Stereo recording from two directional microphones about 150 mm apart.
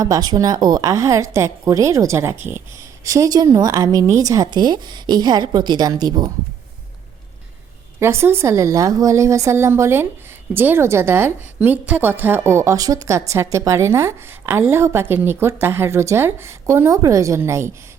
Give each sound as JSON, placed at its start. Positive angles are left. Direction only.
{"t": 0.0, "sound": "speech", "side_deg": -25}
{"t": 7.9, "sound": "a woman's voice", "side_deg": -15}